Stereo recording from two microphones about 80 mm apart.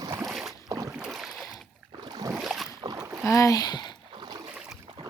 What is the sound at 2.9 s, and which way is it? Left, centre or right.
Rowboat, right.